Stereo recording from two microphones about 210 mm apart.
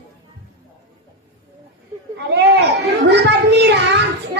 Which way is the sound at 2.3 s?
55° right (ahead or behind).